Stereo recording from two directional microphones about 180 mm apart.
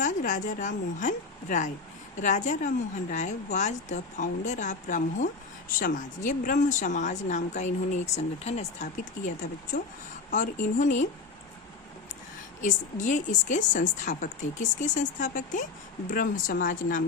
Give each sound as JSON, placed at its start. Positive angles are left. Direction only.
{"t": 0.0, "sound": "a woman's voice", "side_deg": 45}
{"t": 12.6, "sound": "a woman's voice", "side_deg": 45}